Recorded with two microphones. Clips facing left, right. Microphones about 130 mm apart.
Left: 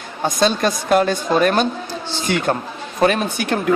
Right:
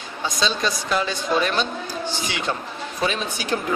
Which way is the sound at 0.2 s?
55° left (ahead or behind).